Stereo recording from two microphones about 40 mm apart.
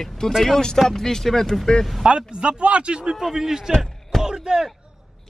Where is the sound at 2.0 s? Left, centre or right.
Right.